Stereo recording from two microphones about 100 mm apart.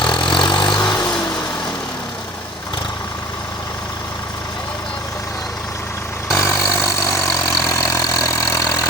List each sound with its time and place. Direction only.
0.0 s vehicle: 50° left (ahead or behind)
6.3 s vehicle: 25° left (ahead or behind)